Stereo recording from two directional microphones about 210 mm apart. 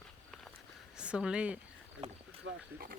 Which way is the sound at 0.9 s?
5° right (ahead or behind).